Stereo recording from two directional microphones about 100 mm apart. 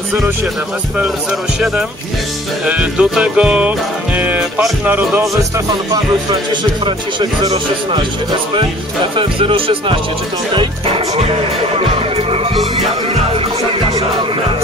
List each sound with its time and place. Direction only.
2.6 s music: 10° right (ahead or behind)
4.8 s speech: 20° right (ahead or behind)
7.4 s speech: 60° right (ahead or behind)
9.1 s speech: 60° right (ahead or behind)
11.7 s music: 75° right (ahead or behind)